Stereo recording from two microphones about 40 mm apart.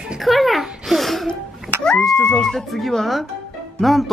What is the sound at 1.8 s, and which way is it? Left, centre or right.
Speech, centre.